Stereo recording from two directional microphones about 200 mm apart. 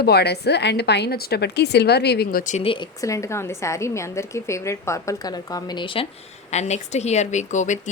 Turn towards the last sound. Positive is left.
turn(degrees=35)  # may be behind; listen again after turning